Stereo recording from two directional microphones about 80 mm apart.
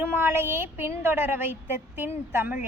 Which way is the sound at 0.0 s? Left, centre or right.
Right.